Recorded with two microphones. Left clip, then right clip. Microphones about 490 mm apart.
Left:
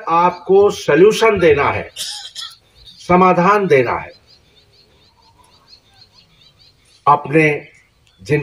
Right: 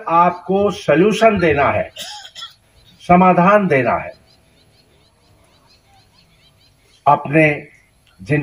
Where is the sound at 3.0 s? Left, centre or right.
Centre.